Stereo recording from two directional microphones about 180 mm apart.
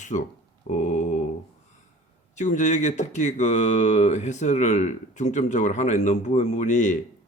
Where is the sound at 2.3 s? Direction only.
45° left (ahead or behind).